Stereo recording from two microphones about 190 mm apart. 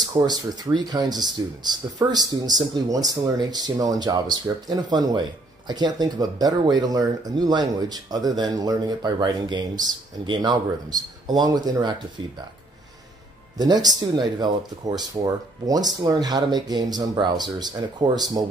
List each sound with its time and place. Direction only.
0.0 s speech: 20° right (ahead or behind)
13.6 s speech: 20° right (ahead or behind)